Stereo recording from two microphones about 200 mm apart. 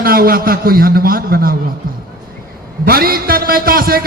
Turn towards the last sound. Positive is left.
turn(degrees=-50)  # may be behind; listen again after turning